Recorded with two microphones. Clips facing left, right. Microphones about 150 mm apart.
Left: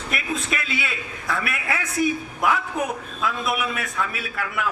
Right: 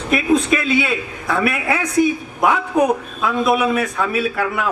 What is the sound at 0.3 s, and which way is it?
A man's voice, 25° right (ahead or behind).